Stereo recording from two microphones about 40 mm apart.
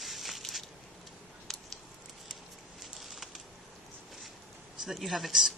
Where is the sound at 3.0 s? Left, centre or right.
Centre.